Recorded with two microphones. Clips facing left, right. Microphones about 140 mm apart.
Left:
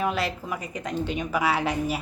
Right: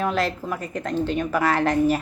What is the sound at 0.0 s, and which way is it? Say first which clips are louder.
A woman's voice: right 3 dB; 10° left (ahead or behind).